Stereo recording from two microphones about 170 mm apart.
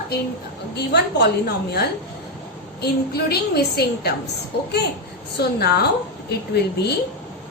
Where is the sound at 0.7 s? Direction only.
75° left (ahead or behind).